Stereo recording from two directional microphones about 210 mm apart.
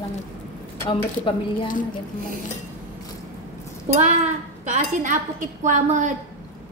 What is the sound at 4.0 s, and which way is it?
A woman's voice, 35° right (ahead or behind).